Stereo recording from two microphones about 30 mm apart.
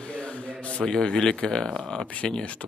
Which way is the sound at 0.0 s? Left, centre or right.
Left.